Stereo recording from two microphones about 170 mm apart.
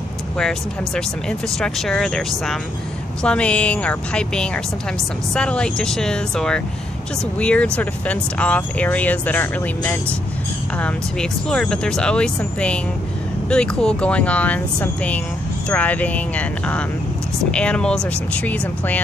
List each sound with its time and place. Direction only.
0.4 s speech: 5° left (ahead or behind)